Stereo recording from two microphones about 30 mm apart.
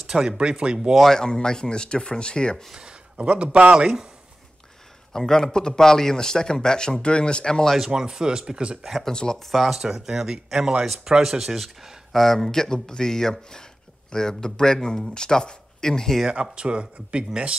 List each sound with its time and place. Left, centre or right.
0.0 s a sound: right
0.4 s speech: right
1.0 s a man's voice: centre
2.7 s speech: right
3.2 s a man's voice: right
3.7 s speech: right
5.1 s a man's voice: centre; by 7.6 s left
7.8 s speech: centre
9.1 s a man's voice: left
9.4 s speech: centre
9.8 s speech: centre
12.1 s a man's voice: centre
16.5 s speech: right